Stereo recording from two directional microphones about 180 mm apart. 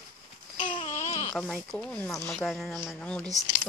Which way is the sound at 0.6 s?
30° left (ahead or behind).